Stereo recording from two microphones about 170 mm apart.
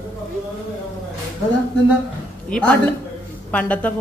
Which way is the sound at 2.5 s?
5° left (ahead or behind).